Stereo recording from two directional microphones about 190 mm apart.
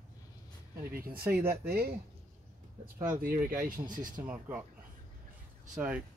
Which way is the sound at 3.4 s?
15° right (ahead or behind).